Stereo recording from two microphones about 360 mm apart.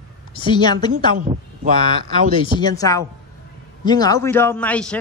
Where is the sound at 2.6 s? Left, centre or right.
Centre.